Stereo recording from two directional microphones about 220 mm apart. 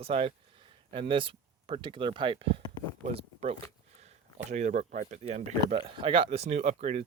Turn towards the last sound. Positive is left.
turn(degrees=-30)  # may be behind; listen again after turning